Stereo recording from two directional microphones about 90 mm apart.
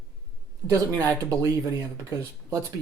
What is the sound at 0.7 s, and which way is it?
Speech, 35° right (ahead or behind).